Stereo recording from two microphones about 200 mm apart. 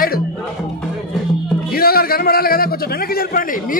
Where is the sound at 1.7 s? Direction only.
50° left (ahead or behind).